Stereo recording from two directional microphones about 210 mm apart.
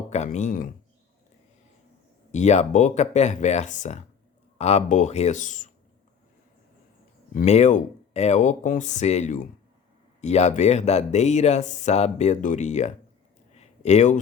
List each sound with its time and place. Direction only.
0.1 s speech: 35° left (ahead or behind)
2.3 s speech: 35° left (ahead or behind)
7.3 s speech: 30° left (ahead or behind)
13.5 s a sound: 30° left (ahead or behind)